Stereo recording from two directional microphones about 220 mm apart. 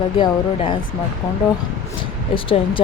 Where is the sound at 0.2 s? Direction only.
20° left (ahead or behind).